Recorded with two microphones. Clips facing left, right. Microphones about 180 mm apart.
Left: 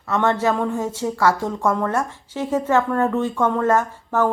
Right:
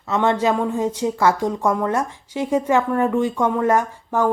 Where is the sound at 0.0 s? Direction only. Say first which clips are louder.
Right 1 dB; 15° right (ahead or behind).